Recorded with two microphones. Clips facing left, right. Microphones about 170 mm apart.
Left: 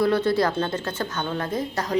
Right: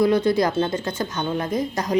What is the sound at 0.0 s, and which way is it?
Speech, 15° right (ahead or behind).